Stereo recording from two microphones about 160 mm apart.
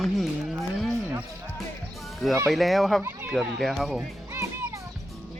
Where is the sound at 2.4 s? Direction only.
Centre (ahead or behind).